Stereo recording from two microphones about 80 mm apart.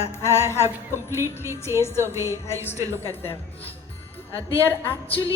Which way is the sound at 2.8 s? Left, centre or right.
Right.